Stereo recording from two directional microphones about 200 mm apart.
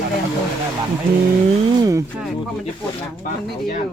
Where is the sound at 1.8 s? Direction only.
15° right (ahead or behind).